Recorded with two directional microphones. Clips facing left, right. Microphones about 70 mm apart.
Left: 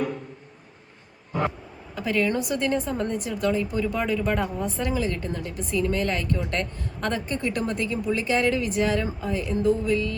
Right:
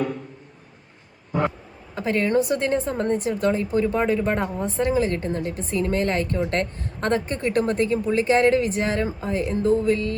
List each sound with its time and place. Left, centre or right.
2.0 s a woman's voice: right